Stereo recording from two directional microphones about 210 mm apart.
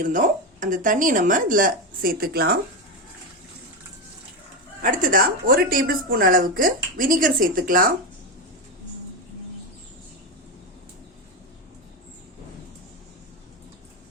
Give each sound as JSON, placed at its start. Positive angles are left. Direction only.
{"t": 0.0, "sound": "speech", "side_deg": -40}
{"t": 4.8, "sound": "speech", "side_deg": -40}